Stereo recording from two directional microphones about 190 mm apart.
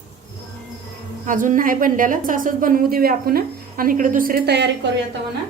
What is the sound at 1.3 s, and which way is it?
A woman's voice, 45° right (ahead or behind).